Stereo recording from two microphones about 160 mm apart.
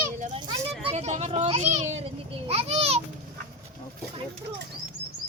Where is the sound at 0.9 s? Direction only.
45° right (ahead or behind).